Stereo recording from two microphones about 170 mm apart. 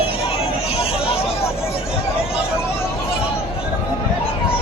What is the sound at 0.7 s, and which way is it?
Chatter, 35° left (ahead or behind).